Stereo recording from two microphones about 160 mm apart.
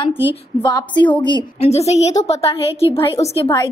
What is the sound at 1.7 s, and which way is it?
Speech, 40° left (ahead or behind).